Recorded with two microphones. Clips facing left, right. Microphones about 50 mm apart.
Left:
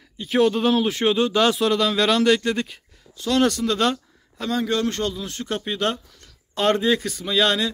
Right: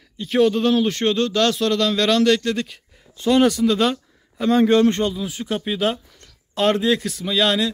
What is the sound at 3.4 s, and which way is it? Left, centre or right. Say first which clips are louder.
Speech: right 2 dB; centre.